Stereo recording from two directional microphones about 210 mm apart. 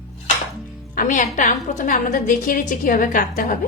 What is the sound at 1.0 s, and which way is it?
A woman's voice, 40° left (ahead or behind).